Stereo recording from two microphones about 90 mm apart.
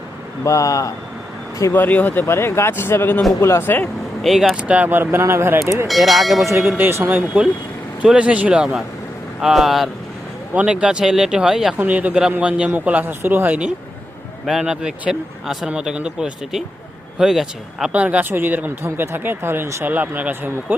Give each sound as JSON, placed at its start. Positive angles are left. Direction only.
{"t": 0.4, "sound": "speech", "side_deg": 35}
{"t": 1.7, "sound": "speech", "side_deg": 20}
{"t": 4.2, "sound": "speech", "side_deg": 0}
{"t": 4.6, "sound": "speech", "side_deg": -15}
{"t": 5.9, "sound": "speech", "side_deg": 0}
{"t": 6.7, "sound": "speech", "side_deg": -25}
{"t": 10.5, "sound": "speech", "side_deg": -15}
{"t": 11.8, "sound": "speech", "side_deg": -15}
{"t": 14.4, "sound": "speech", "side_deg": -5}
{"t": 17.9, "sound": "speech", "side_deg": -15}